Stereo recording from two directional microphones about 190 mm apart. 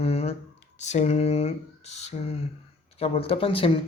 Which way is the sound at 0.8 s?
35° left (ahead or behind).